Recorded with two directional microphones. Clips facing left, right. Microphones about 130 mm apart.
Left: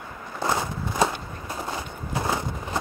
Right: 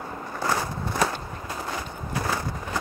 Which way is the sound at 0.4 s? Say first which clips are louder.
Left 1 dB; 20° left (ahead or behind).